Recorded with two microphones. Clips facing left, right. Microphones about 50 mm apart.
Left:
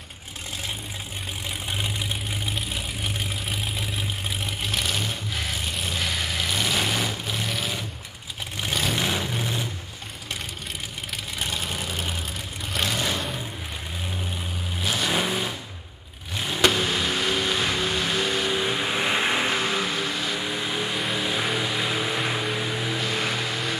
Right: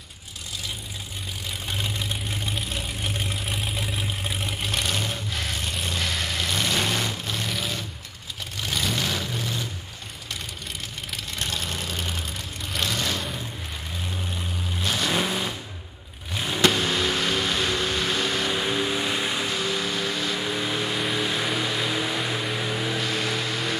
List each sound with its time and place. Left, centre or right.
1.7 s vehicle: centre
8.9 s vehicle: centre
11.3 s vehicle: centre
14.8 s vehicle: centre
18.9 s vehicle: left
20.0 s music: centre